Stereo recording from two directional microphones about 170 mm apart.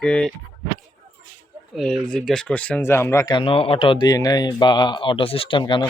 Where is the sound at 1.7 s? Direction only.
5° left (ahead or behind).